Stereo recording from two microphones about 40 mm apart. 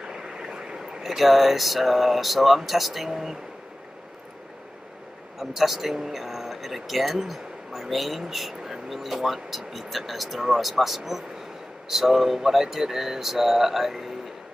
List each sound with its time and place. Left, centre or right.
0.0 s vehicle: centre
1.0 s speech: centre
5.4 s speech: centre